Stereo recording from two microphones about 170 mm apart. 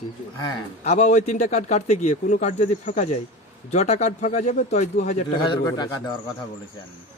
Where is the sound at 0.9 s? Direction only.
45° left (ahead or behind).